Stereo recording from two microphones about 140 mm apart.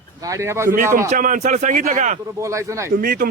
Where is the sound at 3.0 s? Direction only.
85° right.